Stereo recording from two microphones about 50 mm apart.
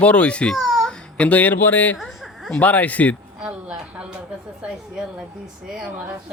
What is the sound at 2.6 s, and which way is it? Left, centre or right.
Speech, left.